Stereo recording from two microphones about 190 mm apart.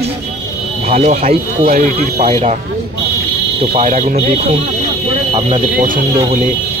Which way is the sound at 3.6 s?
35° right (ahead or behind).